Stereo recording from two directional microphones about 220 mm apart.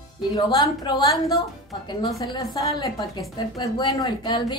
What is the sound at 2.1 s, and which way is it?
A woman's voice, 15° left (ahead or behind).